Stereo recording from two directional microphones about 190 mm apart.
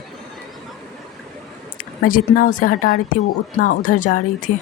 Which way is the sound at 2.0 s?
45° left (ahead or behind).